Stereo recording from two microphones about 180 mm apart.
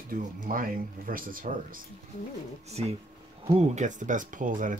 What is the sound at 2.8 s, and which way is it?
Speech, 35° right (ahead or behind).